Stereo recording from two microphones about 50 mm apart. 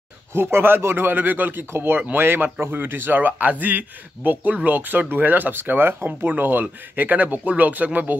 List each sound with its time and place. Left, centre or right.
0.3 s a man's voice: right